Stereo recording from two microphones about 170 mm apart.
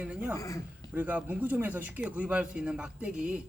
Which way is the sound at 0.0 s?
5° right (ahead or behind).